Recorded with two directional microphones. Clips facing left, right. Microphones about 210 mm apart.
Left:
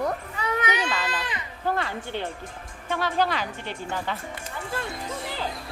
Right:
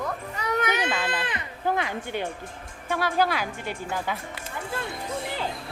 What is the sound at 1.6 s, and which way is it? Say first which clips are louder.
A woman's voice: right 1 dB; 15° right (ahead or behind).